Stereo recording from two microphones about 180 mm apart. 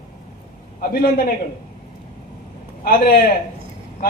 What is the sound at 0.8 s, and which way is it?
Speech, 55° left (ahead or behind).